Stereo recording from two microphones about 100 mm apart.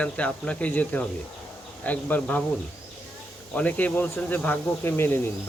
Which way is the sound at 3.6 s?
15° left (ahead or behind).